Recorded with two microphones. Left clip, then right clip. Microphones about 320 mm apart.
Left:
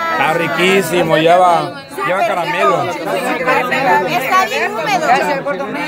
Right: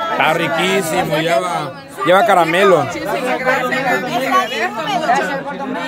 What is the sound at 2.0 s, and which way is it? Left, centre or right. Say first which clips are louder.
Speech: right 4 dB; centre.